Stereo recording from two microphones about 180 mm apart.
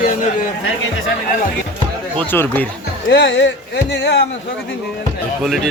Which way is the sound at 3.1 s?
75° left (ahead or behind).